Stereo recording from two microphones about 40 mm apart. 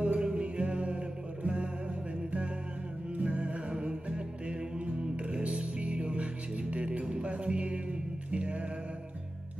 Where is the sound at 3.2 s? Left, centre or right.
Right.